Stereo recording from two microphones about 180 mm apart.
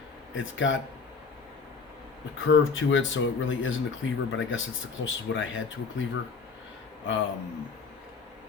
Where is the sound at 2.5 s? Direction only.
90° left.